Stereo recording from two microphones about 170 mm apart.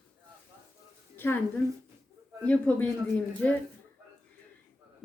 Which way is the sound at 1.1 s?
10° left (ahead or behind).